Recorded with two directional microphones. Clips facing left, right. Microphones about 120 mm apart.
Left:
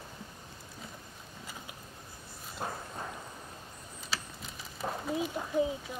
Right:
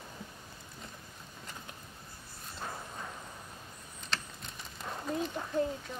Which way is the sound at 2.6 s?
40° left (ahead or behind).